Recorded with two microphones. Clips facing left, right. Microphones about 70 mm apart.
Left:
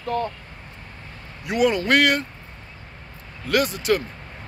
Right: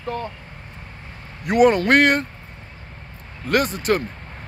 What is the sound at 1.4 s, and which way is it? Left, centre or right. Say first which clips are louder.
Speech: right 5 dB; right.